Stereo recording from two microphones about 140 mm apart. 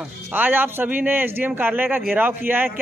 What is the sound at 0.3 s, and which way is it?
A man's voice, 15° right (ahead or behind).